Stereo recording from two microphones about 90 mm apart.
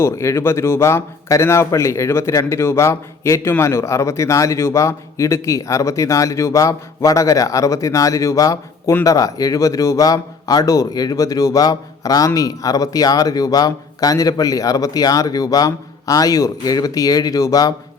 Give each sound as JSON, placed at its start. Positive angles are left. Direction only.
{"t": 0.0, "sound": "speech", "side_deg": 30}